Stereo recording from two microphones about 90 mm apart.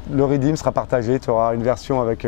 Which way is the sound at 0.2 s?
15° left (ahead or behind).